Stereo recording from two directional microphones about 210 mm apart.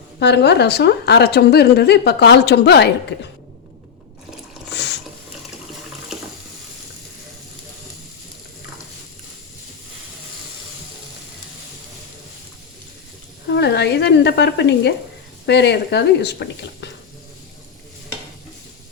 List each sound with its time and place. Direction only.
0.2 s a woman's voice: 55° left (ahead or behind)
4.7 s water: 55° left (ahead or behind)
13.5 s a woman's voice: 55° left (ahead or behind)